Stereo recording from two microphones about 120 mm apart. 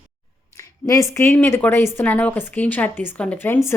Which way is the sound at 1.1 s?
20° left (ahead or behind).